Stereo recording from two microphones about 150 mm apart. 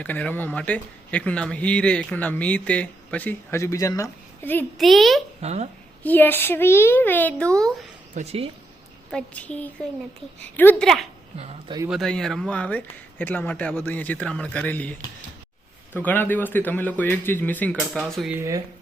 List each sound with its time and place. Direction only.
0.0 s speech: 10° left (ahead or behind)
4.8 s a child's voice: centre (ahead or behind)
5.4 s speech: 45° right (ahead or behind)
6.0 s speech: 10° left (ahead or behind)
8.1 s speech: 45° right (ahead or behind)
9.1 s speech: 10° left (ahead or behind)
11.9 s speech: centre (ahead or behind)
16.0 s speech: 10° left (ahead or behind)
18.3 s speech: 20° right (ahead or behind)